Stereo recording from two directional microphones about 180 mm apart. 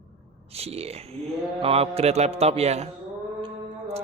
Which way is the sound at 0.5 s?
35° right (ahead or behind).